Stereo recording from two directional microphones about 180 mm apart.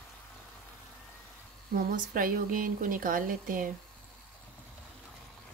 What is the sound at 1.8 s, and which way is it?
Speech, 50° right (ahead or behind).